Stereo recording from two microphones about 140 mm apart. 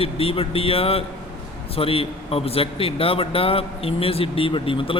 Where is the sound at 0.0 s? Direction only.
40° left (ahead or behind).